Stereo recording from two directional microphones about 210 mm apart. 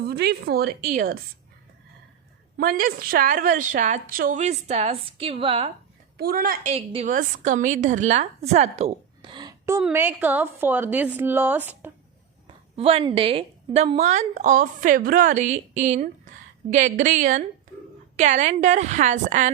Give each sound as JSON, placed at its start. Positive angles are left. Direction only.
{"t": 0.0, "sound": "a woman's voice", "side_deg": -50}
{"t": 2.6, "sound": "a woman's voice", "side_deg": -45}
{"t": 6.1, "sound": "a woman's voice", "side_deg": -45}
{"t": 12.7, "sound": "a woman's voice", "side_deg": -30}